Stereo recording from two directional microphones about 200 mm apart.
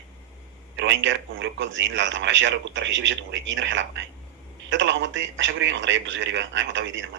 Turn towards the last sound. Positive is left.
turn(degrees=-70)  # may be behind; listen again after turning